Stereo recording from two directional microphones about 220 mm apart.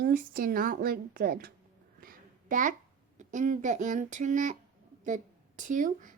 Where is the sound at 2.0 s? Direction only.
40° right (ahead or behind).